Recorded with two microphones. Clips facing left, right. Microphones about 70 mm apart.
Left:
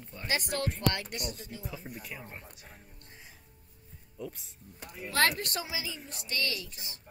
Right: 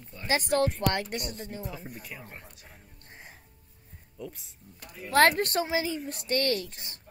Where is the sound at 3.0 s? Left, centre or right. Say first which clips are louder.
Right 7 dB; right.